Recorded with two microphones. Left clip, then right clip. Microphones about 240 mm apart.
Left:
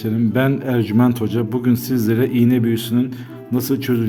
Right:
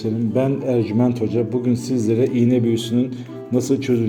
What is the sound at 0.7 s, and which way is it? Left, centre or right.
A man's voice, left.